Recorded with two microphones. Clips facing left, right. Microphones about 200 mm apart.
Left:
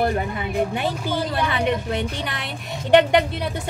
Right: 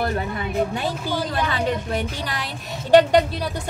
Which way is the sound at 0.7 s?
20° left (ahead or behind).